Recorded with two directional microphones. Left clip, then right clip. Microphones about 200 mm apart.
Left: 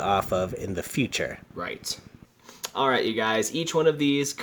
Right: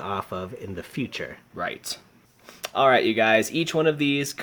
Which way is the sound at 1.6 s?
30° right (ahead or behind).